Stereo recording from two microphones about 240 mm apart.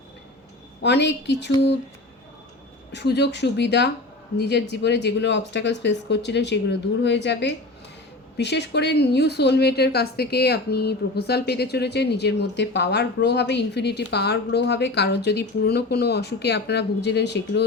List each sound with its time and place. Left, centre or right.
0.8 s a woman's voice: left
2.9 s a woman's voice: left